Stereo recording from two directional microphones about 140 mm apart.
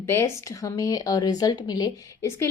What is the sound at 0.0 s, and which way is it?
A woman's voice, 15° left (ahead or behind).